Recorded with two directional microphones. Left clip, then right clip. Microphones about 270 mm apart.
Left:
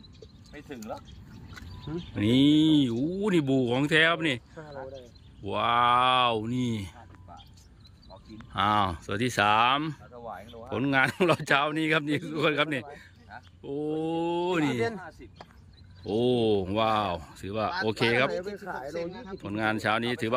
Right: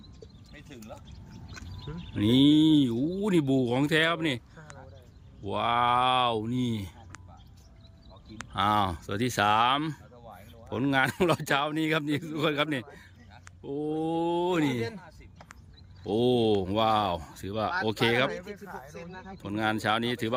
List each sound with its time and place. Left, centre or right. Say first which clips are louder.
2.1 s speech: right 1 dB; centre
8.5 s speech: left 1 dB; centre
14.7 s speech: left 4 dB; left
16.0 s speech: even; centre
18.3 s speech: left 4 dB; left
19.4 s speech: even; centre